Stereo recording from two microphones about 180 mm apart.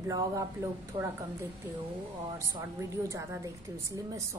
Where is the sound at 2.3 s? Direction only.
15° right (ahead or behind).